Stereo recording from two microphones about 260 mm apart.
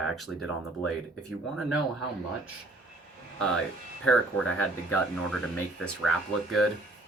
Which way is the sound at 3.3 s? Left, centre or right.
Centre.